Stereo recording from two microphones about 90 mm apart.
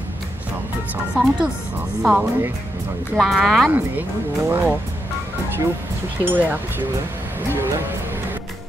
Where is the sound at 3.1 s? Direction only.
Centre (ahead or behind).